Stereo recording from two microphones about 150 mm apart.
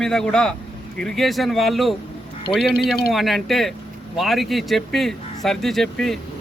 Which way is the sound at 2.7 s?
90° left.